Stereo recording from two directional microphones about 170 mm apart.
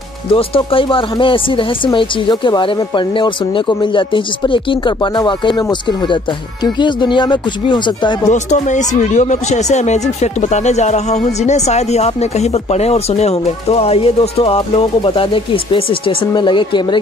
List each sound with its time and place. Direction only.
0.3 s speech: 30° left (ahead or behind)
8.3 s speech: 45° left (ahead or behind); by 17.0 s 25° left (ahead or behind)